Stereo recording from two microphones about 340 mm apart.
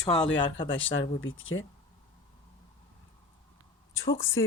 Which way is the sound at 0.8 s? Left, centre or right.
Left.